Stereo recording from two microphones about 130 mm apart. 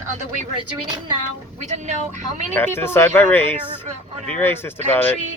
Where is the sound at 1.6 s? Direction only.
65° right (ahead or behind).